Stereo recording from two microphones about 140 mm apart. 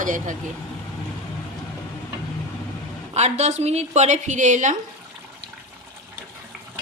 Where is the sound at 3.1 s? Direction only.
50° right (ahead or behind).